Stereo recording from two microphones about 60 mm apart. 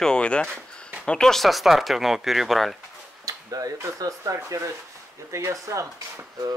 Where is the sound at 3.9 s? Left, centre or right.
Right.